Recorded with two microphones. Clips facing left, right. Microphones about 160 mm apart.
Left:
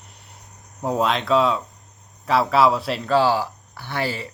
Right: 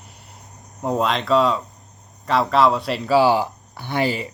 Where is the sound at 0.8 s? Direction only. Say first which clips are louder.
Even; centre (ahead or behind).